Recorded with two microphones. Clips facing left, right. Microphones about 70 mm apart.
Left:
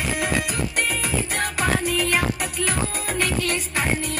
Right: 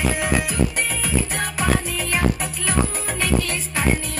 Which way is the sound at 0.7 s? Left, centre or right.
Left.